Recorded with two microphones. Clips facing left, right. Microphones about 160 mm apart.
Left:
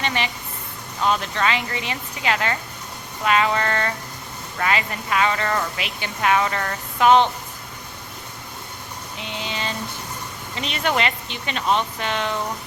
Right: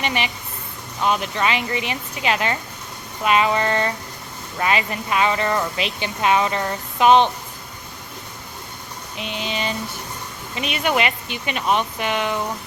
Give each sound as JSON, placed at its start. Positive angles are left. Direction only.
{"t": 0.0, "sound": "a woman's voice", "side_deg": -15}
{"t": 9.1, "sound": "a woman's voice", "side_deg": -20}